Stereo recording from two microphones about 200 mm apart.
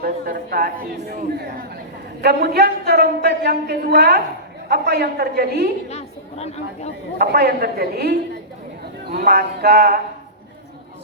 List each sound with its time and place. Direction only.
0.0 s speech: 50° right (ahead or behind)
5.9 s chatter: 30° left (ahead or behind)
7.2 s speech: 50° right (ahead or behind)